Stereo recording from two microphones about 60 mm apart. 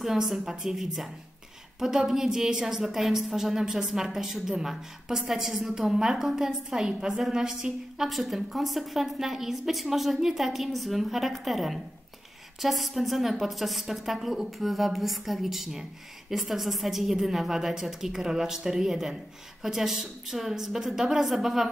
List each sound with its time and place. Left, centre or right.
0.0 s a woman's voice: centre